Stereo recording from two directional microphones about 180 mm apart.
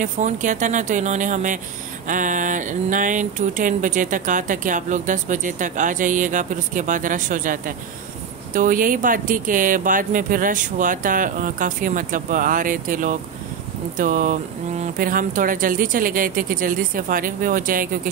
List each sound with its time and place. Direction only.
0.0 s speech: 45° right (ahead or behind)